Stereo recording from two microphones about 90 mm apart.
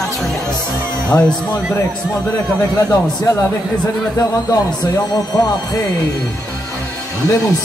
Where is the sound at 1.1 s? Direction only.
10° left (ahead or behind).